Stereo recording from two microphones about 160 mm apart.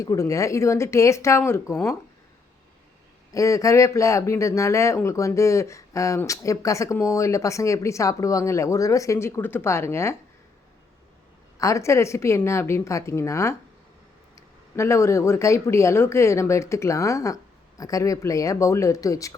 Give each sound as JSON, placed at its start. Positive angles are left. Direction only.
{"t": 0.0, "sound": "a woman's voice", "side_deg": 20}
{"t": 3.3, "sound": "speech", "side_deg": 20}
{"t": 11.6, "sound": "a woman's voice", "side_deg": 20}